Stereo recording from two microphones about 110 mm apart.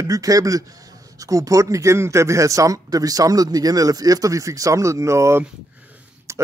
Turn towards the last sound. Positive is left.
turn(degrees=-25)  # may be behind; listen again after turning